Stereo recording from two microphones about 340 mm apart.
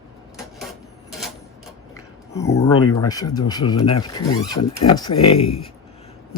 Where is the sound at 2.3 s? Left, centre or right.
Centre.